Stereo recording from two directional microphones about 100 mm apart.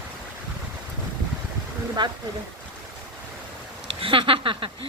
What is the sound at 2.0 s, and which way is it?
Speech, 50° right (ahead or behind).